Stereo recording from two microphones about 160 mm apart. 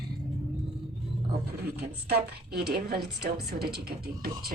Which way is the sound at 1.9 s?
90° right.